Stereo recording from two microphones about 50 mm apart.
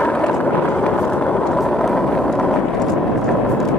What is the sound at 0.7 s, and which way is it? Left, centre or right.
Vehicle, centre.